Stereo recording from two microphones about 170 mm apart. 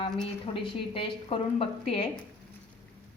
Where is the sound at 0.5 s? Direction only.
30° left (ahead or behind).